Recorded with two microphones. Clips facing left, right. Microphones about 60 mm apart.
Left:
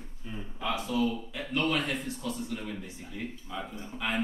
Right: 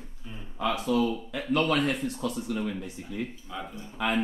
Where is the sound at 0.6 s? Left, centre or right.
Right.